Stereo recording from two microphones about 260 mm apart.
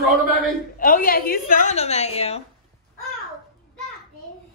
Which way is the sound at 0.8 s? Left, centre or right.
Left.